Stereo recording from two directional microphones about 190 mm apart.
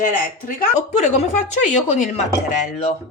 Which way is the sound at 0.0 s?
45° left (ahead or behind).